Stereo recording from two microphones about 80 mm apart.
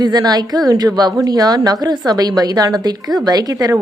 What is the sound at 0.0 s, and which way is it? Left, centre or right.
A woman's voice, right.